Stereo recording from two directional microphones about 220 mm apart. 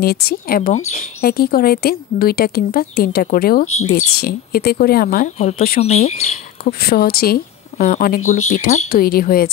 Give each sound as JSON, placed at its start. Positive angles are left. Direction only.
{"t": 0.0, "sound": "a woman's voice", "side_deg": 45}
{"t": 6.6, "sound": "a woman's voice", "side_deg": 45}